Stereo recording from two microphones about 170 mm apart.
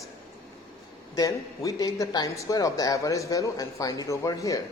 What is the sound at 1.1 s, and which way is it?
Speech, 20° left (ahead or behind).